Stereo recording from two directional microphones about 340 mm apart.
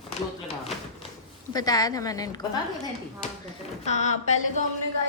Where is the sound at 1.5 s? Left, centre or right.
Centre.